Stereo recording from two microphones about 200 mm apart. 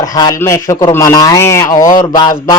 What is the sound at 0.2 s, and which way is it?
Speech, 15° left (ahead or behind).